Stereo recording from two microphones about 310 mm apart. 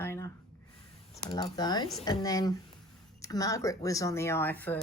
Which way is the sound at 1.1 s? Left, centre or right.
Centre.